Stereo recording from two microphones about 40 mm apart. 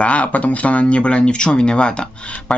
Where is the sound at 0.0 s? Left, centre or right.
Left.